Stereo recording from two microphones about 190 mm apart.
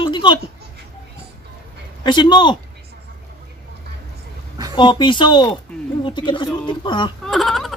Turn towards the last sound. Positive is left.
turn(degrees=0)  # may be behind; listen again after turning